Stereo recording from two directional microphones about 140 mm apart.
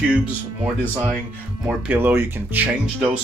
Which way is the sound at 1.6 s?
15° right (ahead or behind).